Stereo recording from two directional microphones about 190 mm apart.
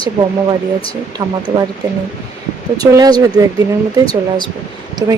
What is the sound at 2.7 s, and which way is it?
Speech, 20° right (ahead or behind).